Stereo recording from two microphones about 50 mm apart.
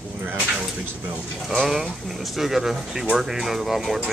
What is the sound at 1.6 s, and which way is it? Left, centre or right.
Speech, centre.